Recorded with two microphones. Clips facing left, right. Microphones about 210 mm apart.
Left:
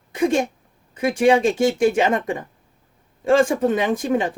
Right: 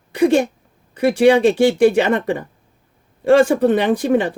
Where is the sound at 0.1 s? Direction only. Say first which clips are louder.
Right 5 dB; 75° right (ahead or behind).